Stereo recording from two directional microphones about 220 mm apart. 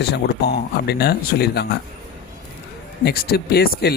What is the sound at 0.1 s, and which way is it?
Speech, 45° left (ahead or behind).